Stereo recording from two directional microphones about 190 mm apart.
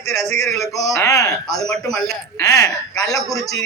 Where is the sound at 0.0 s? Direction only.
15° left (ahead or behind).